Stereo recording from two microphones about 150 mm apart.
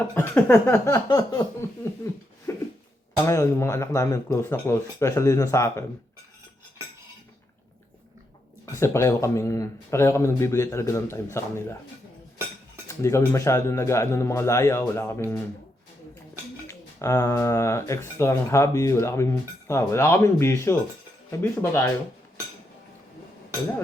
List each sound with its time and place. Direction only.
0.1 s a sound: 10° left (ahead or behind)
0.9 s speech: 25° left (ahead or behind)
8.6 s speech: 20° left (ahead or behind)
12.9 s speech: 20° left (ahead or behind)
16.6 s speech: 20° left (ahead or behind)
21.2 s a sound: 20° left (ahead or behind)